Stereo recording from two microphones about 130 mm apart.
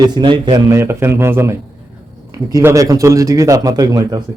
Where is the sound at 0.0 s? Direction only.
35° right (ahead or behind).